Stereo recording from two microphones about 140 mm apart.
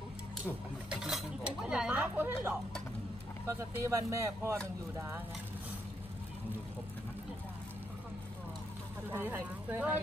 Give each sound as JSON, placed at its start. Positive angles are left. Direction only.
{"t": 0.8, "sound": "speech", "side_deg": -5}
{"t": 9.1, "sound": "speech", "side_deg": -15}